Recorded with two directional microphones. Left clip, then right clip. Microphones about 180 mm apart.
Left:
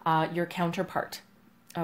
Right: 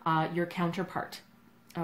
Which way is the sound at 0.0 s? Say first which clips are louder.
Left 3 dB; 45° left (ahead or behind).